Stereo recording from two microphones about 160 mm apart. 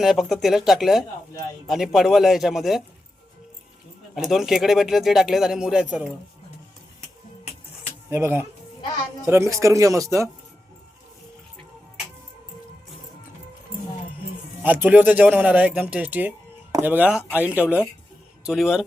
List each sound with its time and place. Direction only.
0.0 s speech: centre (ahead or behind)
4.3 s speech: centre (ahead or behind)
8.1 s speech: 15° right (ahead or behind)
14.6 s speech: 10° right (ahead or behind)